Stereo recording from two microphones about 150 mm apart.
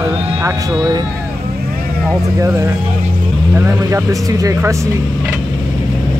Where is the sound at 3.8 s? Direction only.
20° right (ahead or behind).